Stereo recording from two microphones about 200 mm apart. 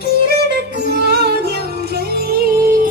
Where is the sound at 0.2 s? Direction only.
55° right (ahead or behind).